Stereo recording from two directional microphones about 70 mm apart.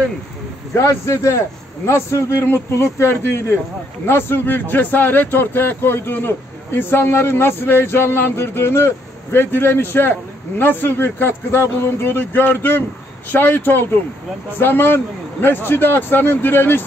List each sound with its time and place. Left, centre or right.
0.7 s a man's voice: left